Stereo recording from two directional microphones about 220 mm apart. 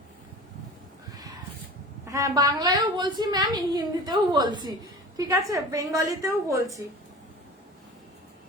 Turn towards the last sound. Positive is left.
turn(degrees=-15)  # may be behind; listen again after turning